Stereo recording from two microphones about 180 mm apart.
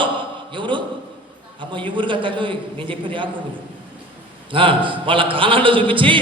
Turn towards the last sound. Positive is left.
turn(degrees=-30)  # may be behind; listen again after turning